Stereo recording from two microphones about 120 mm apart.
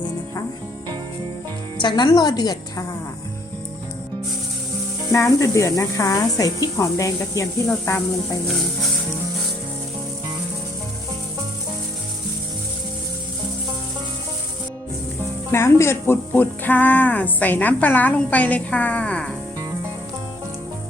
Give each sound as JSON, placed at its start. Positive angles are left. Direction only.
{"t": 1.8, "sound": "a woman's voice", "side_deg": 40}
{"t": 5.1, "sound": "speech", "side_deg": 25}
{"t": 15.5, "sound": "speech", "side_deg": 20}